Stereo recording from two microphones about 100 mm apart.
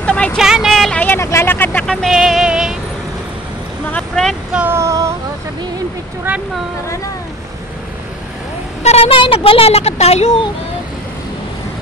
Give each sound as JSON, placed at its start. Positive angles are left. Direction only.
{"t": 0.0, "sound": "vehicle", "side_deg": 10}
{"t": 0.4, "sound": "a sound", "side_deg": -5}
{"t": 0.9, "sound": "vehicle", "side_deg": 20}
{"t": 1.9, "sound": "vehicle", "side_deg": 0}
{"t": 3.9, "sound": "vehicle", "side_deg": 5}
{"t": 4.6, "sound": "female singing", "side_deg": -30}
{"t": 8.8, "sound": "speech", "side_deg": 80}